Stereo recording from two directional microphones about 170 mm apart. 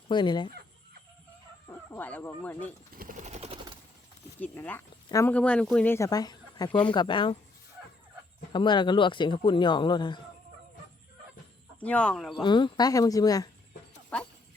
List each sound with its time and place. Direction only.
0.1 s speech: 25° left (ahead or behind)
1.6 s speech: 15° left (ahead or behind)
2.9 s a sound: 55° right (ahead or behind); by 3.8 s 35° right (ahead or behind)
4.4 s speech: 10° left (ahead or behind)
5.3 s speech: 5° left (ahead or behind); by 7.3 s 30° left (ahead or behind)
8.5 s speech: 25° left (ahead or behind)
11.8 s speech: 5° left (ahead or behind)
12.4 s speech: 25° left (ahead or behind)
14.1 s speech: 5° left (ahead or behind)